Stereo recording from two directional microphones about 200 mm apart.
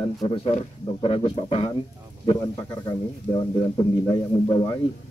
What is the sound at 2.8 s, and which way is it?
Speech, 20° left (ahead or behind).